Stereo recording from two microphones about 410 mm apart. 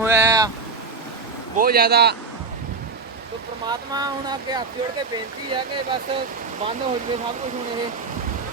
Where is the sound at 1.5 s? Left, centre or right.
Right.